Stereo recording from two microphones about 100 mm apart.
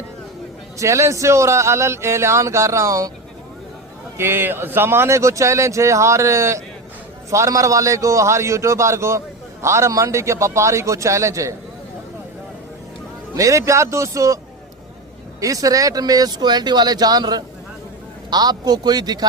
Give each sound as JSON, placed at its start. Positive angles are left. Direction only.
{"t": 0.8, "sound": "a man's voice", "side_deg": -30}
{"t": 4.2, "sound": "a man's voice", "side_deg": -20}
{"t": 13.3, "sound": "a man's voice", "side_deg": -35}
{"t": 15.4, "sound": "a man's voice", "side_deg": -35}